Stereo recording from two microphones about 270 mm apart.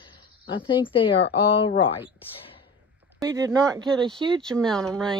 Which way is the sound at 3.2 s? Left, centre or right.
Centre.